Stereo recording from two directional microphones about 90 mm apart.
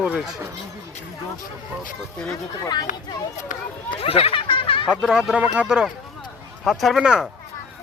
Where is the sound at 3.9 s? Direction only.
90° left; by 4.9 s 70° left (ahead or behind).